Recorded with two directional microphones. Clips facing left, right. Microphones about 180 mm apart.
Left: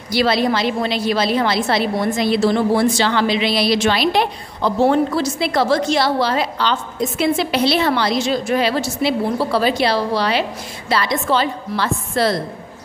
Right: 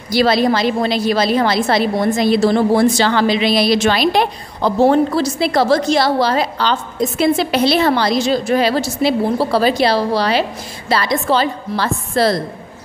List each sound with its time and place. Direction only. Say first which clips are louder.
0.1 s a woman's voice: right 3 dB; 40° right (ahead or behind)